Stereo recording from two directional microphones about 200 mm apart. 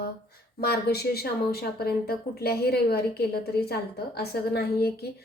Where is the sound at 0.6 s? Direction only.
50° left (ahead or behind).